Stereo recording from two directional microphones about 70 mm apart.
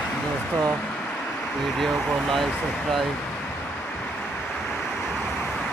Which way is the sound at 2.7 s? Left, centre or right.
Centre.